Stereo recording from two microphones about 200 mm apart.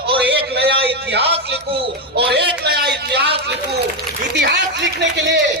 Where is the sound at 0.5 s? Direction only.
55° right (ahead or behind).